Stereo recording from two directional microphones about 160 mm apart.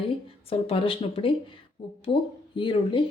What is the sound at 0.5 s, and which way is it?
Speech, 35° left (ahead or behind).